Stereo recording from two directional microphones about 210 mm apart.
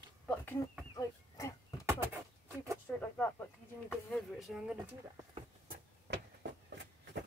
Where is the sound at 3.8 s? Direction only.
Centre (ahead or behind).